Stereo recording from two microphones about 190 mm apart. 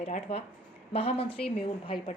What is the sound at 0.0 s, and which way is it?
A woman's voice, 35° left (ahead or behind).